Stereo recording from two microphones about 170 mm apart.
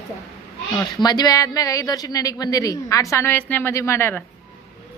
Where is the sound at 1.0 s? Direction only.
25° left (ahead or behind).